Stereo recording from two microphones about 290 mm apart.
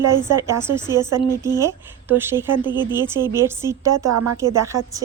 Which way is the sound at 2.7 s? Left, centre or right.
Centre.